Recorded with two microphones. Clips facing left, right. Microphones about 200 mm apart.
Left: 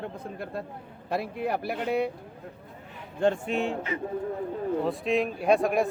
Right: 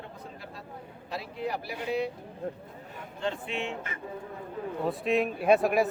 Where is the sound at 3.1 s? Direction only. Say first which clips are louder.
Left 8 dB; 50° left (ahead or behind).